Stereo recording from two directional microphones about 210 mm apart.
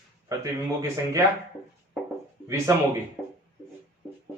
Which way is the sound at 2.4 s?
15° right (ahead or behind).